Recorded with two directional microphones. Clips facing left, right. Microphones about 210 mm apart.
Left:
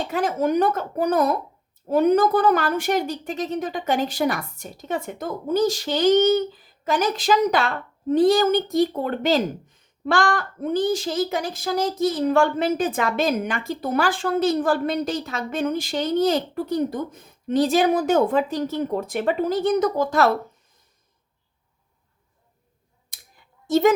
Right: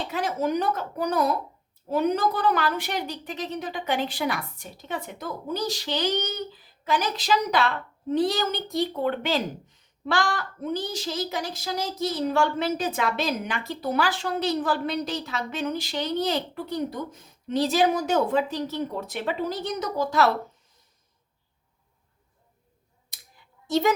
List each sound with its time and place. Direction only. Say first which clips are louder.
0.1 s speech: left 5 dB; 50° left (ahead or behind)
23.6 s speech: left 6 dB; 50° left (ahead or behind)